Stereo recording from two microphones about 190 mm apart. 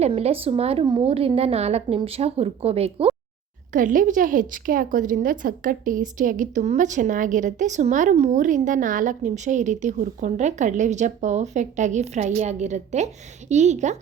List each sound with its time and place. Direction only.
0.0 s a woman's voice: 30° right (ahead or behind)
3.7 s a woman's voice: 45° right (ahead or behind)